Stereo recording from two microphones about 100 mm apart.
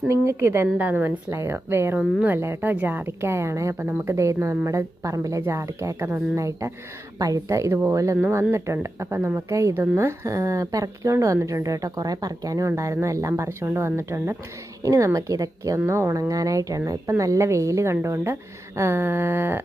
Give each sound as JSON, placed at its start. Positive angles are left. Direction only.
{"t": 0.1, "sound": "a woman's voice", "side_deg": -30}